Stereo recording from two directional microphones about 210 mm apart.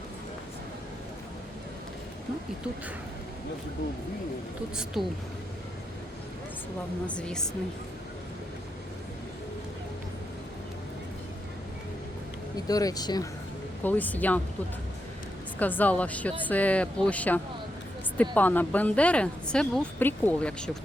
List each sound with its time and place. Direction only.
4.9 s a woman's voice: centre (ahead or behind)
7.1 s a woman's voice: 5° left (ahead or behind)
12.6 s a woman's voice: 15° left (ahead or behind)
13.8 s a woman's voice: 10° left (ahead or behind)
15.5 s a woman's voice: 10° left (ahead or behind)